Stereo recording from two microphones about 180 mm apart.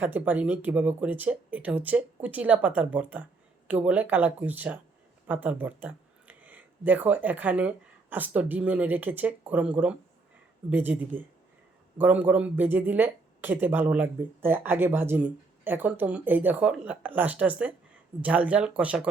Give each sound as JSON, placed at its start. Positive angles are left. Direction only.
{"t": 0.0, "sound": "speech", "side_deg": -10}